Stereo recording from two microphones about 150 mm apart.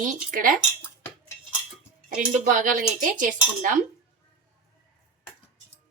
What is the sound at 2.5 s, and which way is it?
Speech, 65° right (ahead or behind).